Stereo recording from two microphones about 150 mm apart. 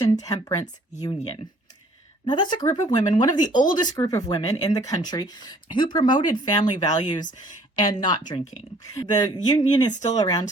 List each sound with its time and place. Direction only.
0.2 s speech: 25° left (ahead or behind)
2.2 s speech: 30° left (ahead or behind)
9.9 s speech: 50° left (ahead or behind)
10.2 s speech: 25° left (ahead or behind)